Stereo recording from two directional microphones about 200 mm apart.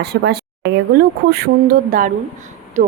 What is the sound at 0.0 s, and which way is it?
A woman's voice, 55° right (ahead or behind).